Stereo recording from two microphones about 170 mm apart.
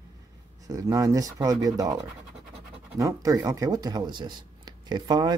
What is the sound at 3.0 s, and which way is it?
Speech, 20° right (ahead or behind).